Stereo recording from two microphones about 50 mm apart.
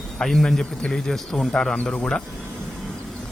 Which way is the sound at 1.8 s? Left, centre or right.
Left.